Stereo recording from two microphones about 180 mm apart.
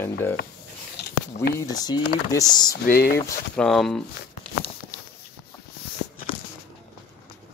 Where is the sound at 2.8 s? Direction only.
55° left (ahead or behind).